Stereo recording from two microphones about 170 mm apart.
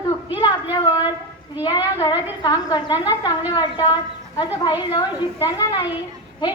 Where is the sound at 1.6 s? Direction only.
25° left (ahead or behind).